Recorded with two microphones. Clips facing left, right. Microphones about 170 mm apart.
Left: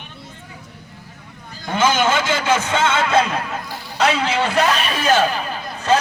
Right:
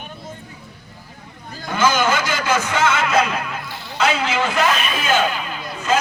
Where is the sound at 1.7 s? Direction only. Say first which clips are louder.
Left 1 dB; 25° left (ahead or behind).